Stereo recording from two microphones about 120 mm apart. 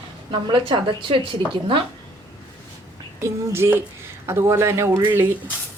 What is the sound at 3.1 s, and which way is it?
Speech, 20° right (ahead or behind).